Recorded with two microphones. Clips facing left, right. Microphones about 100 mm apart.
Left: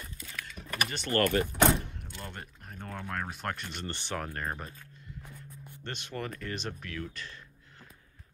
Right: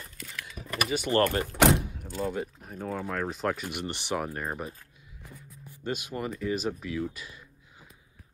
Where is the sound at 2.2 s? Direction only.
5° right (ahead or behind).